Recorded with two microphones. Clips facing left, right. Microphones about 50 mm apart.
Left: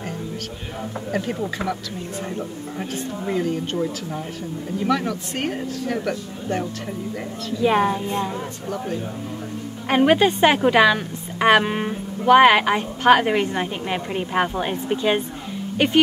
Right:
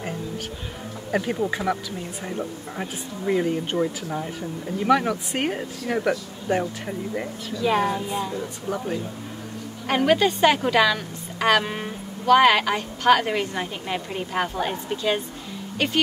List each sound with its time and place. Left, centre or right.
1.1 s speech: centre
7.5 s a woman's voice: centre
8.6 s speech: centre
9.8 s a woman's voice: left